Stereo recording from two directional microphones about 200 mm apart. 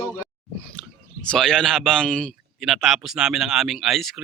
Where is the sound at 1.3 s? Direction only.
5° left (ahead or behind).